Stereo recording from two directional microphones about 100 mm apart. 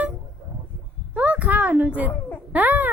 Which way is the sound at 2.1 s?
15° left (ahead or behind).